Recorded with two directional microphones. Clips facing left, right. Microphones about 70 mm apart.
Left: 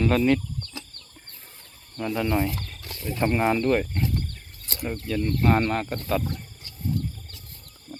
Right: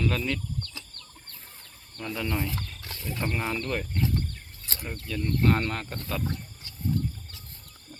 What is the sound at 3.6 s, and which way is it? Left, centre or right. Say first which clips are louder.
Speech: left 9 dB; left.